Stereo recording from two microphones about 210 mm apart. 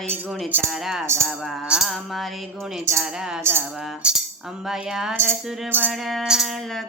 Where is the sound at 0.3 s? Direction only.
Centre (ahead or behind).